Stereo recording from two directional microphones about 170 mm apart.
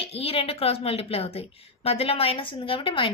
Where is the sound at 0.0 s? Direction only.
35° left (ahead or behind).